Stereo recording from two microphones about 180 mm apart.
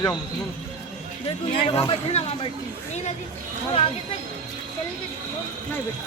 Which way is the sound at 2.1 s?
35° left (ahead or behind).